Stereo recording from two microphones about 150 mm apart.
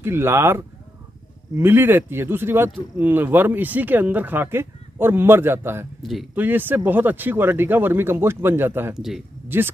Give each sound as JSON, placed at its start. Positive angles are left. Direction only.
{"t": 0.0, "sound": "speech", "side_deg": -15}
{"t": 8.9, "sound": "speech", "side_deg": -5}
{"t": 9.5, "sound": "speech", "side_deg": -15}